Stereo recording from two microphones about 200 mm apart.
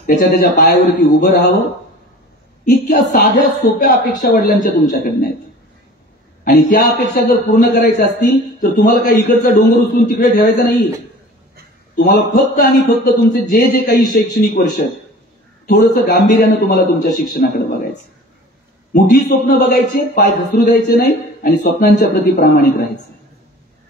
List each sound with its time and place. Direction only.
0.0 s a man's voice: 50° left (ahead or behind)
2.6 s a man's voice: 40° left (ahead or behind)
6.4 s a man's voice: 45° left (ahead or behind)
12.0 s a man's voice: 50° left (ahead or behind)
15.6 s a man's voice: 50° left (ahead or behind)
18.9 s a man's voice: 40° left (ahead or behind)